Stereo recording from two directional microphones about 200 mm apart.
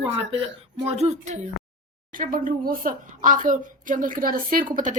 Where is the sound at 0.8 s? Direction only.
30° right (ahead or behind).